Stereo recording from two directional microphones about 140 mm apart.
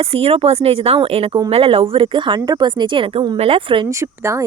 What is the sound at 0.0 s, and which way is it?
Speech, 45° right (ahead or behind).